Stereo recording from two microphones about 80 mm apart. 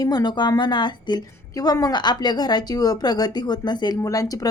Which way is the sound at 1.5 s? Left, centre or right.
Left.